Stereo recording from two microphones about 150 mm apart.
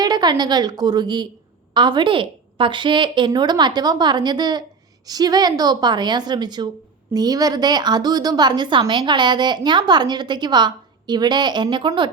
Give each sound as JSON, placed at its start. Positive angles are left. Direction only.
{"t": 0.0, "sound": "a woman's voice", "side_deg": -30}